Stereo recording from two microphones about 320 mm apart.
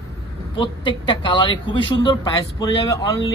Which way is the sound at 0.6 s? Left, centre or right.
Centre.